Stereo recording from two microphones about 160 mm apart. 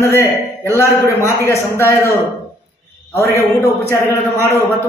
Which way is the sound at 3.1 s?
15° left (ahead or behind).